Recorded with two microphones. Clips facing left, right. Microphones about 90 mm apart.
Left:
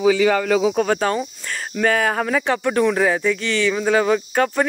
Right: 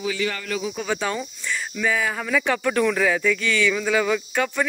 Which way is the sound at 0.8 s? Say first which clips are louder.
Left 6 dB; 45° left (ahead or behind).